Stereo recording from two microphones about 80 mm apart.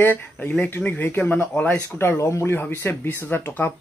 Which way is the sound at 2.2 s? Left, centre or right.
Left.